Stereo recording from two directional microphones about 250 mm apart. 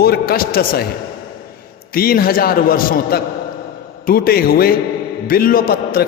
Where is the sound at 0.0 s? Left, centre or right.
Left.